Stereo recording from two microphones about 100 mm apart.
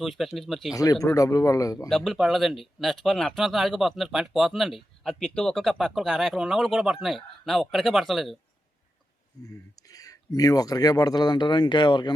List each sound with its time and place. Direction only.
0.0 s speech: centre (ahead or behind)
1.0 s speech: 35° left (ahead or behind)
1.9 s speech: 5° left (ahead or behind)
9.4 s speech: 35° left (ahead or behind); by 12.1 s 50° left (ahead or behind)